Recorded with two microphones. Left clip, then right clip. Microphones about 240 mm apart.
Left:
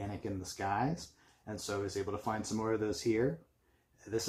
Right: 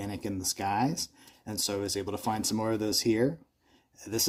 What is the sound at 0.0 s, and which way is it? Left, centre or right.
Speech, right.